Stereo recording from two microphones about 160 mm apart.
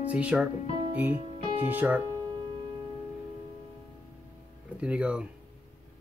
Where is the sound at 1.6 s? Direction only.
10° right (ahead or behind).